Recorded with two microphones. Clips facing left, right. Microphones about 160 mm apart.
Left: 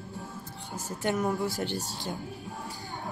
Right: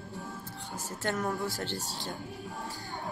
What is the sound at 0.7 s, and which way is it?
Speech, 20° left (ahead or behind).